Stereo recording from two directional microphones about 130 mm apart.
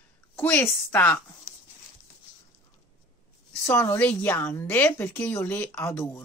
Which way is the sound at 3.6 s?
20° left (ahead or behind).